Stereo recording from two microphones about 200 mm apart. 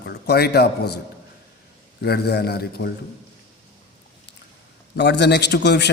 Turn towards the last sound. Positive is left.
turn(degrees=60)  # may be behind; listen again after turning